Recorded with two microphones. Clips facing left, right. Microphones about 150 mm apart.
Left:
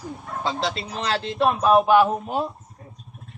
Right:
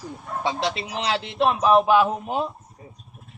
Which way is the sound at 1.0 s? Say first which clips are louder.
Even; 20° right (ahead or behind).